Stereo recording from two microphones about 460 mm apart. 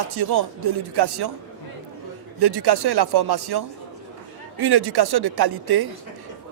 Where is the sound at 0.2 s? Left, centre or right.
Right.